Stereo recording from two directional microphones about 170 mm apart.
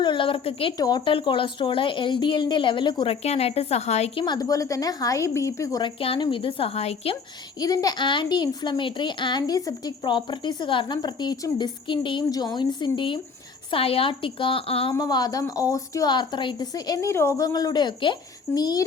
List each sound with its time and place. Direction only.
0.0 s a woman's voice: 30° left (ahead or behind)
7.6 s a woman's voice: 20° left (ahead or behind)
14.9 s a woman's voice: 25° left (ahead or behind)